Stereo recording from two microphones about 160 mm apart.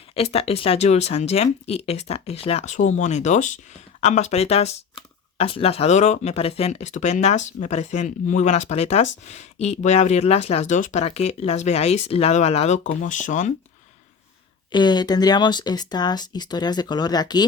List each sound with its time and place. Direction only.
0.1 s speech: 40° left (ahead or behind)
14.7 s speech: 25° left (ahead or behind)